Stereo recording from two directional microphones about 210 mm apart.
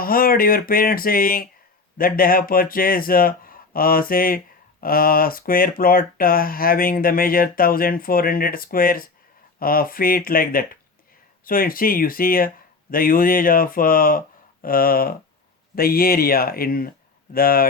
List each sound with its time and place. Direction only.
0.0 s speech: 45° left (ahead or behind)